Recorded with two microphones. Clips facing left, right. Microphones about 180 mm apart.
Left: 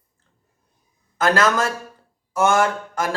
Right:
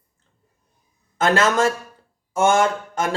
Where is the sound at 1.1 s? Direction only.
25° right (ahead or behind).